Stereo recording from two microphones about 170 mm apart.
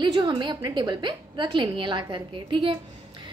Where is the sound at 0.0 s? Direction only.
25° right (ahead or behind).